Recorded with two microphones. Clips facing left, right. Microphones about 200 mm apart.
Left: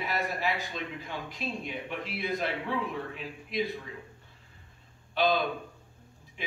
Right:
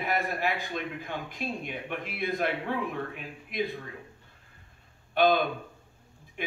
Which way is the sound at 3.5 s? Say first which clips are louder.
Even; 50° right (ahead or behind).